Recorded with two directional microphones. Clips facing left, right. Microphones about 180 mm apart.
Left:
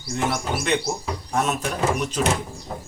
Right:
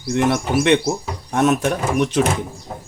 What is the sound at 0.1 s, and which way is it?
Speech, 75° right (ahead or behind).